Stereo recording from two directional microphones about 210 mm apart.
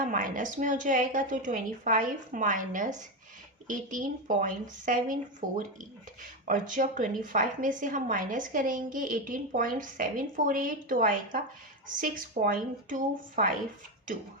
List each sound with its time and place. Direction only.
0.0 s a woman's voice: 40° right (ahead or behind)